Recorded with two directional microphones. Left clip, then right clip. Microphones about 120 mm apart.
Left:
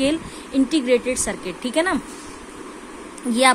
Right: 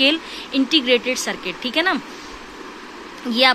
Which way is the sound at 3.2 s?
30° left (ahead or behind).